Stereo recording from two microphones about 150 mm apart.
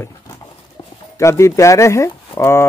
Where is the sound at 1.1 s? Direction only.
20° left (ahead or behind).